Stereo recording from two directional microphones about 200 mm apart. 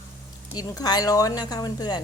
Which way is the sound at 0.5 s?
20° left (ahead or behind).